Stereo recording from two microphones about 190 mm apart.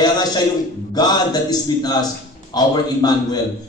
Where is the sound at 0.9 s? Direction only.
20° left (ahead or behind).